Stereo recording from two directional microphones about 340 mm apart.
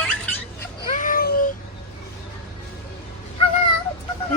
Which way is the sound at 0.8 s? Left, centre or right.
Left.